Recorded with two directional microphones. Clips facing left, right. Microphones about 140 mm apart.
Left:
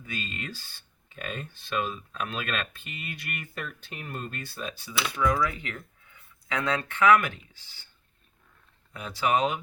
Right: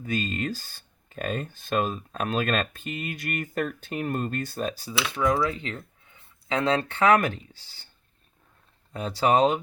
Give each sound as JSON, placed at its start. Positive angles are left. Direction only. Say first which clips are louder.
{"t": 0.0, "sound": "speech", "louder": "right 9 dB", "side_deg": -40}
{"t": 5.1, "sound": "speech", "louder": "right 2 dB", "side_deg": -25}
{"t": 8.9, "sound": "speech", "louder": "right 4 dB", "side_deg": -35}